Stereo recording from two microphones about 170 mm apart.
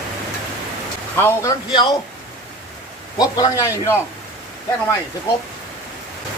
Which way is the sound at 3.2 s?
20° left (ahead or behind).